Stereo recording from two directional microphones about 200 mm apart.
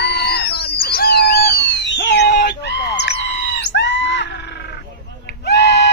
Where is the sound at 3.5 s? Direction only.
60° left (ahead or behind).